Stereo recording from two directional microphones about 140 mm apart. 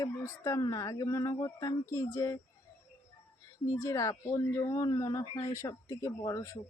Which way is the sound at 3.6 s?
20° left (ahead or behind).